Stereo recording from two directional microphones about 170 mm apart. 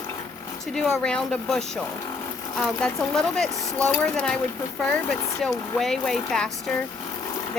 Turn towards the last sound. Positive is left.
turn(degrees=5)  # may be behind; listen again after turning